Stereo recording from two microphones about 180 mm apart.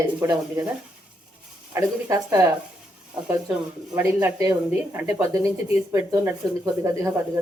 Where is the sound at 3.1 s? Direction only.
20° right (ahead or behind).